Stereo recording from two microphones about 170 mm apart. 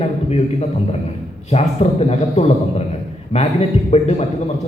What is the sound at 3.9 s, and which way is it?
Speech, 40° left (ahead or behind).